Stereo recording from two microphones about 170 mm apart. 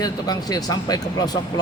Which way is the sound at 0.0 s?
20° left (ahead or behind).